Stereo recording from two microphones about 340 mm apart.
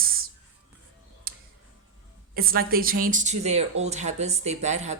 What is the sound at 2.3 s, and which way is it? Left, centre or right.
Speech, right.